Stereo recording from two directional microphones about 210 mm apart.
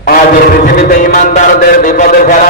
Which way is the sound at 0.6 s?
40° left (ahead or behind).